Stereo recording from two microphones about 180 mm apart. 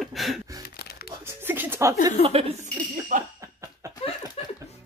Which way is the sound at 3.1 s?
45° right (ahead or behind).